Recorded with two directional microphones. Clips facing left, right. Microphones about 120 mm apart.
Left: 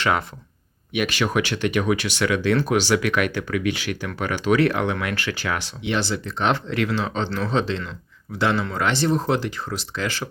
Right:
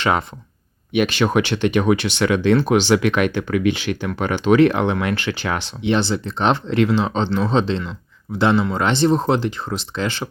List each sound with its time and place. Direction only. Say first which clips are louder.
0.0 s speech: right 3 dB; 25° right (ahead or behind)